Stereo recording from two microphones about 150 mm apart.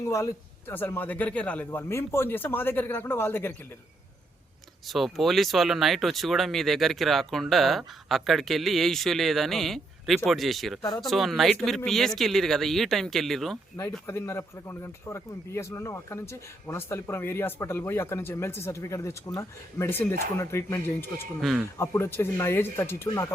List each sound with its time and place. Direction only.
0.0 s speech: 20° left (ahead or behind)
4.9 s speech: centre (ahead or behind)
13.7 s speech: 15° left (ahead or behind)